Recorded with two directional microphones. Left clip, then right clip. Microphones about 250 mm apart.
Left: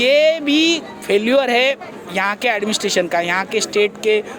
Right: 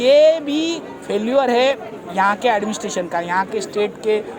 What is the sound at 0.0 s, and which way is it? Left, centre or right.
Music, left.